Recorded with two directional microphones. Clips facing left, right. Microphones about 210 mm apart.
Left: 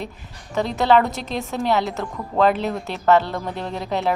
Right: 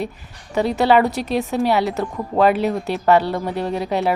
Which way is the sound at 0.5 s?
15° right (ahead or behind).